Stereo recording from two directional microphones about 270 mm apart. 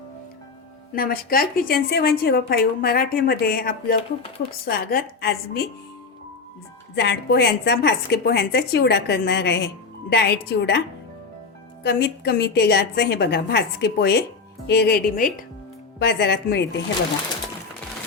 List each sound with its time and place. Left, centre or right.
0.9 s a woman's voice: left
6.9 s a woman's voice: left